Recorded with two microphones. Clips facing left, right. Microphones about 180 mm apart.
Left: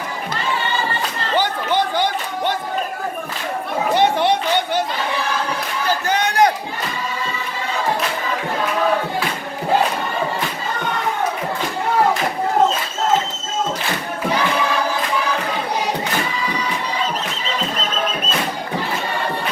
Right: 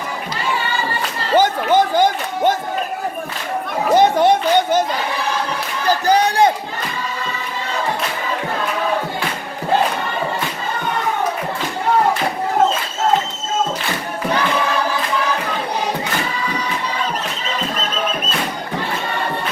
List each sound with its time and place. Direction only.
1.4 s speech: 45° right (ahead or behind)
3.9 s speech: 40° right (ahead or behind)
6.1 s a sound: 35° right (ahead or behind)